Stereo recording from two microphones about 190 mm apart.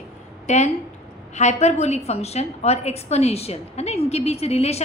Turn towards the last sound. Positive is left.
turn(degrees=35)  # may be behind; listen again after turning